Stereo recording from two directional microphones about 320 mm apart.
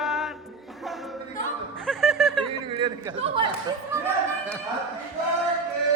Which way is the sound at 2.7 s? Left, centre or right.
Centre.